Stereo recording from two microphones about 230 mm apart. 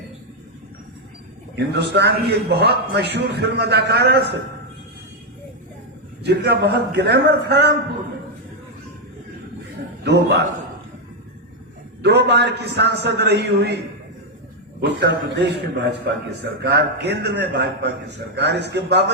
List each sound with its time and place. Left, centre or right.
1.5 s a man's voice: right
6.2 s a man's voice: right
10.0 s a man's voice: right
12.0 s a man's voice: right
15.0 s a man's voice: right